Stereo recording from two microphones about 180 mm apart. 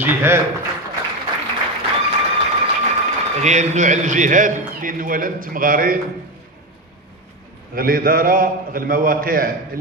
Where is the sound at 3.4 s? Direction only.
40° right (ahead or behind).